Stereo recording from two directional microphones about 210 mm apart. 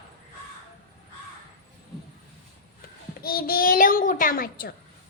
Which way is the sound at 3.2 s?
45° left (ahead or behind).